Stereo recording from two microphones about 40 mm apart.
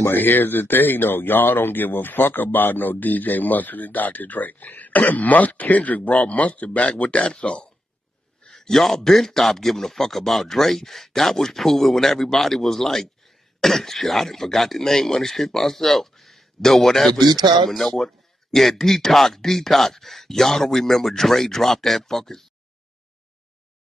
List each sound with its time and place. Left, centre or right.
0.1 s speech: left
8.5 s speech: centre